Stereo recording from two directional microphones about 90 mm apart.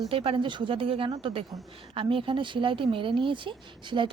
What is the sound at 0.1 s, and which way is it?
Speech, 90° right.